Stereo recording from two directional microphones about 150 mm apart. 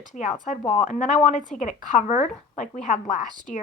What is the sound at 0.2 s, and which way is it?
Speech, 55° left (ahead or behind).